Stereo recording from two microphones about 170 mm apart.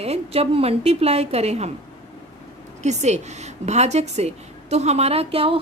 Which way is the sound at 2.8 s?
40° right (ahead or behind).